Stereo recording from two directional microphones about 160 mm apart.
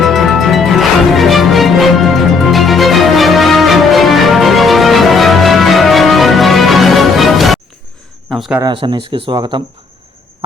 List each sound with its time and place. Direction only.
0.0 s music: centre (ahead or behind)
8.3 s a sound: centre (ahead or behind)
8.7 s speech: 35° right (ahead or behind)